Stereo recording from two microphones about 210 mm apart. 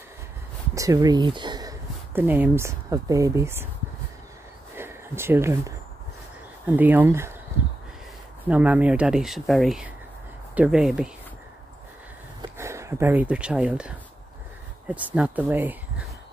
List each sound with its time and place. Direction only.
0.7 s speech: 15° right (ahead or behind)
4.7 s a sound: 10° right (ahead or behind)
6.8 s speech: 10° right (ahead or behind)
8.5 s speech: 5° right (ahead or behind)
12.4 s speech: 15° right (ahead or behind)